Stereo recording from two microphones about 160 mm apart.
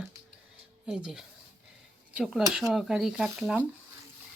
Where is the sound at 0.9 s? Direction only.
5° right (ahead or behind).